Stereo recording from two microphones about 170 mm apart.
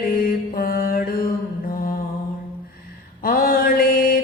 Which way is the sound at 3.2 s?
55° left (ahead or behind).